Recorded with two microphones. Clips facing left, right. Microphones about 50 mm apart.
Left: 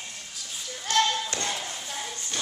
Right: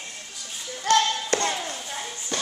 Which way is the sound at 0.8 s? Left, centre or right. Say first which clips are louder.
Right 4 dB; right.